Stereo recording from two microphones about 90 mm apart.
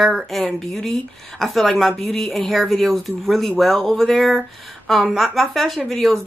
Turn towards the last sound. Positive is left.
turn(degrees=5)  # may be behind; listen again after turning